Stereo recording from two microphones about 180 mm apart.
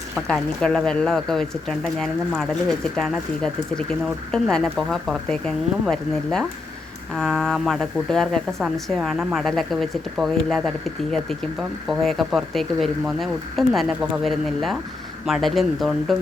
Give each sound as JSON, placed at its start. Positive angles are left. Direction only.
{"t": 0.3, "sound": "speech", "side_deg": 5}
{"t": 11.9, "sound": "speech", "side_deg": 0}